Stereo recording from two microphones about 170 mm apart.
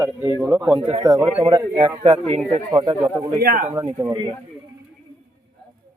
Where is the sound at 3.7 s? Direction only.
25° right (ahead or behind).